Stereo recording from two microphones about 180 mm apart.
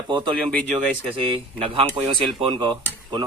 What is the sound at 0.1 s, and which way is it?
A man's voice, 25° right (ahead or behind).